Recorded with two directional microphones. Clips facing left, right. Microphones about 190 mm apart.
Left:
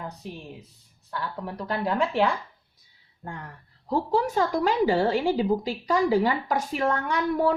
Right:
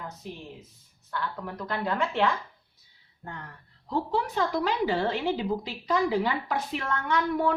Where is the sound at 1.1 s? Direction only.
35° left (ahead or behind).